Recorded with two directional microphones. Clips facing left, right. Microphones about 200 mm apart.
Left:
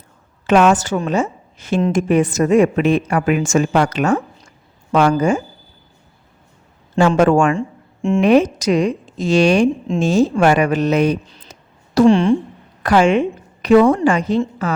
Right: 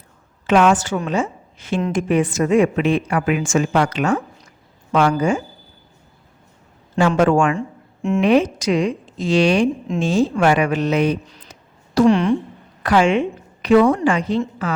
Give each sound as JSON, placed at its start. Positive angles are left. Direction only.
{"t": 0.4, "sound": "a woman's voice", "side_deg": 45}
{"t": 7.2, "sound": "a woman's voice", "side_deg": 45}
{"t": 12.0, "sound": "speech", "side_deg": 30}
{"t": 12.8, "sound": "a woman's voice", "side_deg": 45}